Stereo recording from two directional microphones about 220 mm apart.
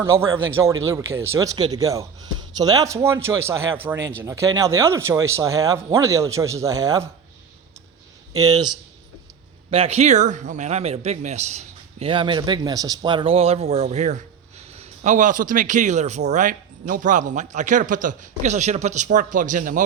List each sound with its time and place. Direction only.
0.0 s speech: 10° right (ahead or behind)
8.4 s a man's voice: 15° right (ahead or behind); by 19.8 s 35° right (ahead or behind)